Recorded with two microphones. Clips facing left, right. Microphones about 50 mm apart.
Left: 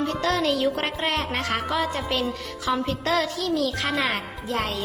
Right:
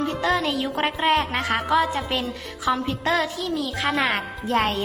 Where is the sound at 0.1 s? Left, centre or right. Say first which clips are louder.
Even; centre.